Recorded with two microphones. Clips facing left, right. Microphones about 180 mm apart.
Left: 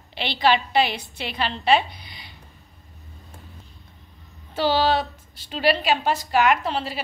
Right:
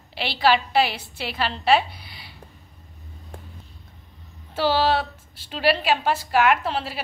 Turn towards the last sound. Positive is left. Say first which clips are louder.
# even
turn(degrees=-5)  # may be behind; listen again after turning